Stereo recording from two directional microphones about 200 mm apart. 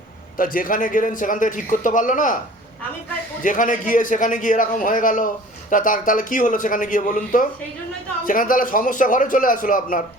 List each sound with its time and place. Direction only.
0.3 s a man's voice: 45° left (ahead or behind)
3.4 s a man's voice: 40° left (ahead or behind)